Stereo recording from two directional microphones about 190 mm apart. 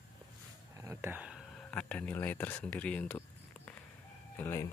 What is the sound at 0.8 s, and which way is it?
Speech, 10° right (ahead or behind).